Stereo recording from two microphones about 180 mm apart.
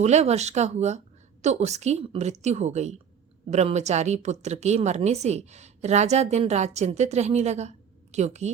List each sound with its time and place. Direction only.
0.0 s a woman's voice: 40° right (ahead or behind)